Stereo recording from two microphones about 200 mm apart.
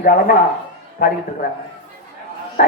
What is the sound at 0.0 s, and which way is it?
Speech, 45° left (ahead or behind).